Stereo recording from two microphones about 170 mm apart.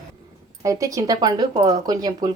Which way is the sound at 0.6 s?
20° right (ahead or behind).